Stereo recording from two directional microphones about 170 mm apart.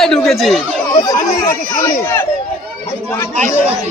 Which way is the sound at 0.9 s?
20° left (ahead or behind).